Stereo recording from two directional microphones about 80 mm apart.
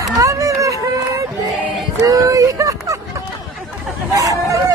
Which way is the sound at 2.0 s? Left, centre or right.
Right.